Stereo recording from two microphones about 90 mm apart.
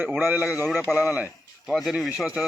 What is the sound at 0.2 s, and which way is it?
Speech, 20° right (ahead or behind).